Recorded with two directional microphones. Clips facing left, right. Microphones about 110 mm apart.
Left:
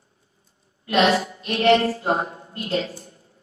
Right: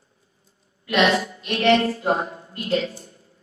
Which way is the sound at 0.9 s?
35° left (ahead or behind).